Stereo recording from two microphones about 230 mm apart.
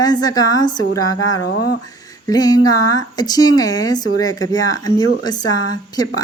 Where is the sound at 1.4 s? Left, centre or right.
Left.